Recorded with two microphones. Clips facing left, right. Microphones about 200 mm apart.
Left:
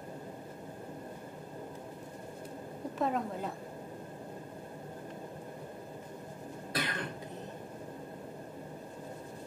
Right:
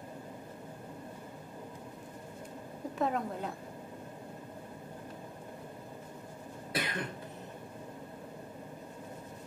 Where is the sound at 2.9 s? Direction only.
Centre (ahead or behind).